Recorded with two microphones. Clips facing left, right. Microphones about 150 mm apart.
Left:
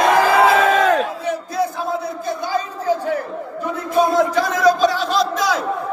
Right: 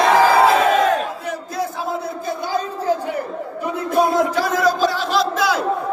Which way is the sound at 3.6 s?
5° right (ahead or behind).